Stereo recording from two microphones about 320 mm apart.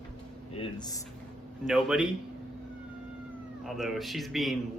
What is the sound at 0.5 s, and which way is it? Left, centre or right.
Speech, centre.